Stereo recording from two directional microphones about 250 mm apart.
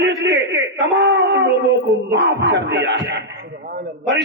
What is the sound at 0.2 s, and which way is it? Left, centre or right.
Dog, right.